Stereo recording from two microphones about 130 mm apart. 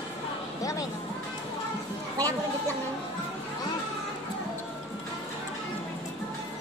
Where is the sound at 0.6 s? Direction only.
25° left (ahead or behind).